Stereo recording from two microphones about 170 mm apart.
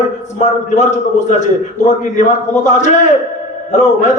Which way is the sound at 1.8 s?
45° left (ahead or behind).